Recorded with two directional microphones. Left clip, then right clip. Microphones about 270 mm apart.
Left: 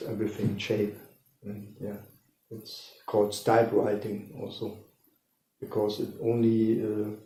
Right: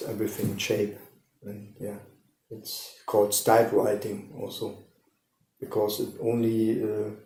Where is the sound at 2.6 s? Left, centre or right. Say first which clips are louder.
Right 8 dB; right.